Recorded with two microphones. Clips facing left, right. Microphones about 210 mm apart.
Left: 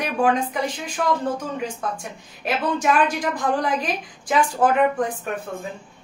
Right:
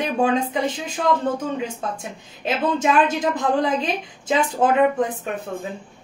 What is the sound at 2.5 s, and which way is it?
A woman's voice, 25° right (ahead or behind).